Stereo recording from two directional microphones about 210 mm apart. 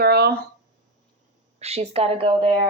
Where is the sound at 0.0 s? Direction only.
50° right (ahead or behind).